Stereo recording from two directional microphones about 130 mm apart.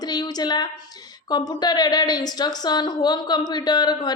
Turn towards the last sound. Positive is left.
turn(degrees=35)  # may be behind; listen again after turning